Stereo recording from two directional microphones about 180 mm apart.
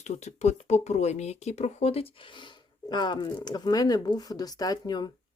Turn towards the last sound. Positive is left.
turn(degrees=20)  # may be behind; listen again after turning